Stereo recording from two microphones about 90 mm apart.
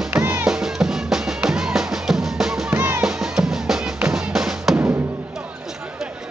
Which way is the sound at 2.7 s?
20° right (ahead or behind).